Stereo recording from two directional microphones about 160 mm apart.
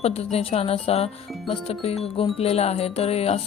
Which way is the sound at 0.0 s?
40° left (ahead or behind).